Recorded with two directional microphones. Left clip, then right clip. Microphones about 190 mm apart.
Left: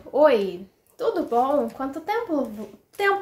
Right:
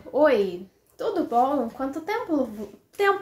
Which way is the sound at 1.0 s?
10° left (ahead or behind).